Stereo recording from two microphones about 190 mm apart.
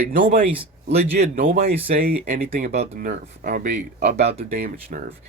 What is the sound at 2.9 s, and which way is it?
Speech, 50° right (ahead or behind).